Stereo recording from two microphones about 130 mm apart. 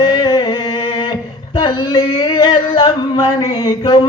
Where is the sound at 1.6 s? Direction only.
35° left (ahead or behind).